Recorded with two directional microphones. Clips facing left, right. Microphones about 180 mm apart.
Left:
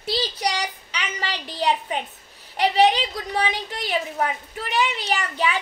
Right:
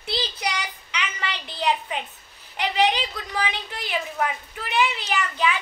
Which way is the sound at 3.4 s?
35° left (ahead or behind).